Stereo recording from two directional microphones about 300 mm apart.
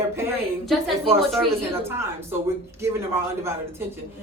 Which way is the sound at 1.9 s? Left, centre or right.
Centre.